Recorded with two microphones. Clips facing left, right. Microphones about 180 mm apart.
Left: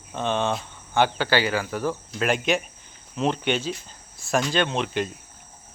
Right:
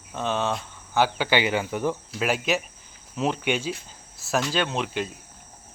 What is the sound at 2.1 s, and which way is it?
Speech, 5° right (ahead or behind).